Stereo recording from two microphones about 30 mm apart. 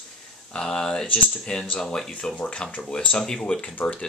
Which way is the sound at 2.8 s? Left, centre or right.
Left.